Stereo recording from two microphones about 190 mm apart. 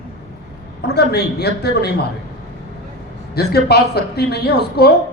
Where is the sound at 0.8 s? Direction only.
60° left (ahead or behind).